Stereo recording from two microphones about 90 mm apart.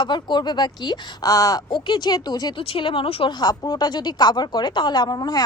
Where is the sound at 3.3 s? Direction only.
50° left (ahead or behind).